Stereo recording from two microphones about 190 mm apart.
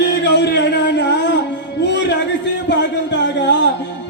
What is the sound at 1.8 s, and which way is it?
Music, 65° left (ahead or behind).